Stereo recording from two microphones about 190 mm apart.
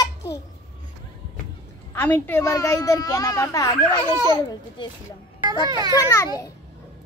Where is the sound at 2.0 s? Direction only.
10° left (ahead or behind).